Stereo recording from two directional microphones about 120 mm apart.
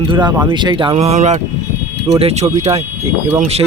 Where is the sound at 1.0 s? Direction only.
70° right (ahead or behind).